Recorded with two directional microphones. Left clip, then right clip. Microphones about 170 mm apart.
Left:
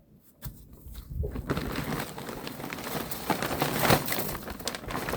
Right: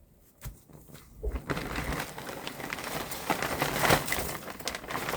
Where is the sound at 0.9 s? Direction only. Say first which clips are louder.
Left 1 dB; 40° left (ahead or behind).